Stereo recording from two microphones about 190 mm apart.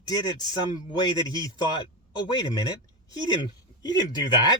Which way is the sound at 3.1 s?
20° left (ahead or behind).